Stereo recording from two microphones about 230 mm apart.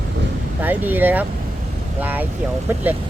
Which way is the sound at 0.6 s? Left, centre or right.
Centre.